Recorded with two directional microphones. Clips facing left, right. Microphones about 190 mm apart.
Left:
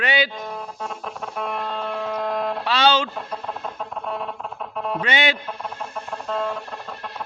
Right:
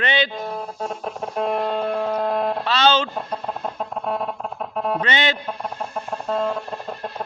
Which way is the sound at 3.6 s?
40° right (ahead or behind).